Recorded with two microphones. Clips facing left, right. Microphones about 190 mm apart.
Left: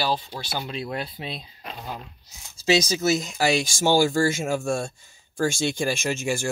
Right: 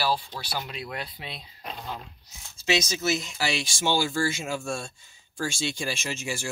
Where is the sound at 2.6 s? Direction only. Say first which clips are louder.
Left 5 dB; 35° left (ahead or behind).